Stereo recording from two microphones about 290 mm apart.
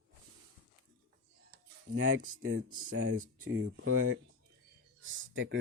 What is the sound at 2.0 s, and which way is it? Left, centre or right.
Speech, right.